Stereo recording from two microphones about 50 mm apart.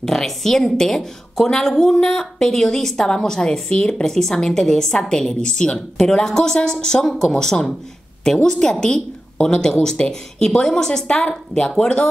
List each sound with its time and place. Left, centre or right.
0.0 s a woman's voice: centre